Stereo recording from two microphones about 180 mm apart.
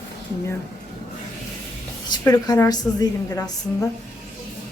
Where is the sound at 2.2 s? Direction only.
20° left (ahead or behind).